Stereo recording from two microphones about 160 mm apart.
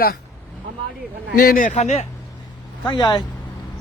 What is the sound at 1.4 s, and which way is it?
Speech, 65° left (ahead or behind).